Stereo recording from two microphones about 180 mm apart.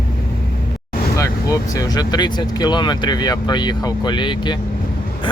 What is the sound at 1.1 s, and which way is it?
Speech, 15° left (ahead or behind).